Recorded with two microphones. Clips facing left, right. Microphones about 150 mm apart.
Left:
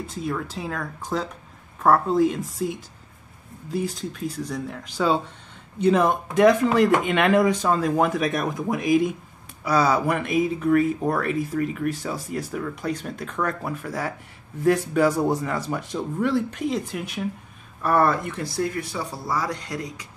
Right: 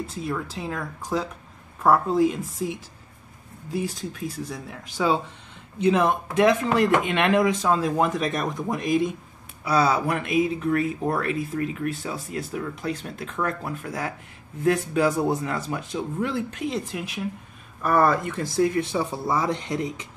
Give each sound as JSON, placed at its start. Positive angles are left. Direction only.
{"t": 0.0, "sound": "speech", "side_deg": 0}
{"t": 18.4, "sound": "speech", "side_deg": -20}